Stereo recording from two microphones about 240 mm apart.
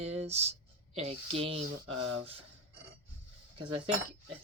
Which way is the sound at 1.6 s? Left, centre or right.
Right.